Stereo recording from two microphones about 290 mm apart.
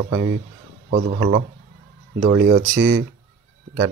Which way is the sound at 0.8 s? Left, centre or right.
Right.